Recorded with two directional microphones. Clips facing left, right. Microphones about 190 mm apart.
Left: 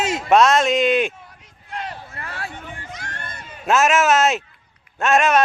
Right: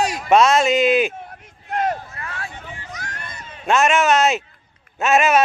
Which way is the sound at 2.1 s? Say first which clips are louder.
Even; 30° left (ahead or behind).